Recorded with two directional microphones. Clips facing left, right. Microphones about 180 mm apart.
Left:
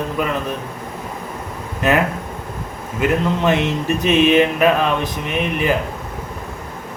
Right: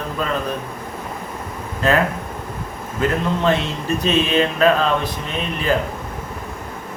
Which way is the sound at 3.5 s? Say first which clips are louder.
Left 2 dB; 15° left (ahead or behind).